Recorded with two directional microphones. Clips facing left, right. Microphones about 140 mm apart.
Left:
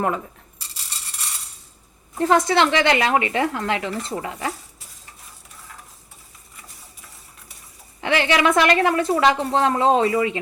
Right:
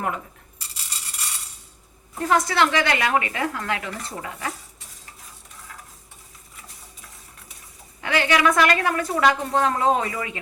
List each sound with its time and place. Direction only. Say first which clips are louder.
0.6 s a sound: even; centre (ahead or behind)
2.2 s a woman's voice: left 3 dB; 25° left (ahead or behind)
6.6 s sewing machine: even; centre (ahead or behind)
8.0 s a woman's voice: left 2 dB; 25° left (ahead or behind)